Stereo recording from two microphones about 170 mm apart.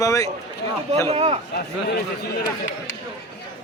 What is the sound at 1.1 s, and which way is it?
Speech, 35° right (ahead or behind).